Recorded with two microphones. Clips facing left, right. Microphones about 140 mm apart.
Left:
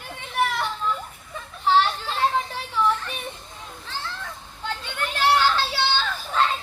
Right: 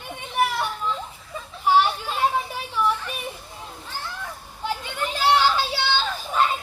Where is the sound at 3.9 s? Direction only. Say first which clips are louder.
Left 1 dB; 10° right (ahead or behind).